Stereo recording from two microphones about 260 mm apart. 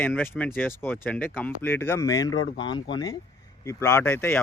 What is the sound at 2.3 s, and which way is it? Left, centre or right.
Speech, left.